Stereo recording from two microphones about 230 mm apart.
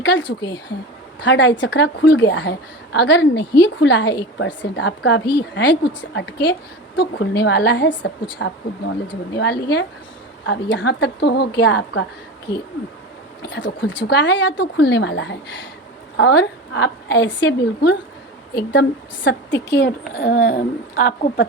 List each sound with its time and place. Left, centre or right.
0.0 s a woman's voice: left
0.3 s a woman's voice: centre
1.2 s a woman's voice: left
13.4 s a woman's voice: left